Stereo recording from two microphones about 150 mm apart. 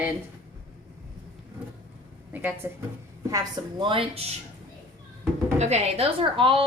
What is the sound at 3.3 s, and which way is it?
Speech, 30° right (ahead or behind).